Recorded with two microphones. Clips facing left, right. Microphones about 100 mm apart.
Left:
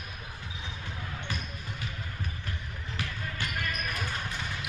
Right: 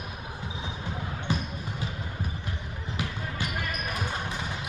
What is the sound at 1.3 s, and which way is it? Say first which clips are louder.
Basketball bounce: right 9 dB; 20° right (ahead or behind).